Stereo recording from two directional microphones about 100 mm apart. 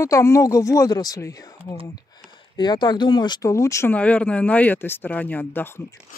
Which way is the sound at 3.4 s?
30° left (ahead or behind).